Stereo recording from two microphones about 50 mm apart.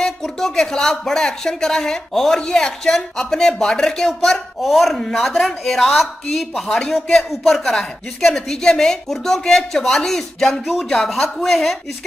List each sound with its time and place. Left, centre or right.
0.0 s speech: centre